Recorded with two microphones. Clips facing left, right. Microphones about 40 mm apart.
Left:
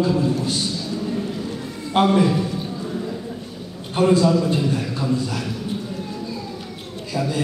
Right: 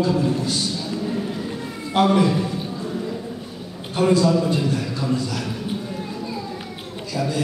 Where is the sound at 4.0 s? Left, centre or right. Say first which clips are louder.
Left 1 dB; centre.